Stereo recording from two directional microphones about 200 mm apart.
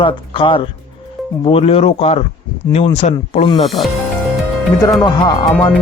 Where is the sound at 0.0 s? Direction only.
25° left (ahead or behind).